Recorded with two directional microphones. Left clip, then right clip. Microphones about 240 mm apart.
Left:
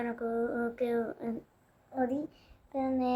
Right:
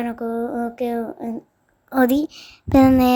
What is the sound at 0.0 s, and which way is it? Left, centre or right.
Speech, right.